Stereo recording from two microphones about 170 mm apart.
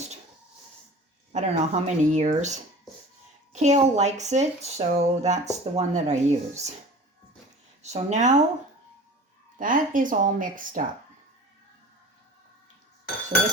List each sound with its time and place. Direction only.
1.3 s speech: 45° right (ahead or behind)
7.8 s speech: 40° right (ahead or behind)
9.6 s speech: 50° right (ahead or behind)